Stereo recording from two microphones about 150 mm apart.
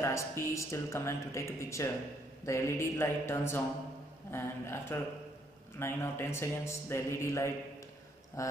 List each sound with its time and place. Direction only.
0.0 s a man's voice: 20° left (ahead or behind)